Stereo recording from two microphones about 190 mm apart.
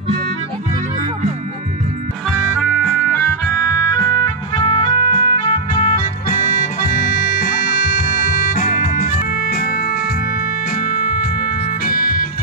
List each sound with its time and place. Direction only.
2.5 s music: 5° left (ahead or behind)
4.0 s music: 20° left (ahead or behind); by 12.3 s 50° left (ahead or behind)